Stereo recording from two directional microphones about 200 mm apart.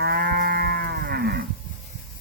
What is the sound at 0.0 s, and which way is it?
Moo, 50° right (ahead or behind).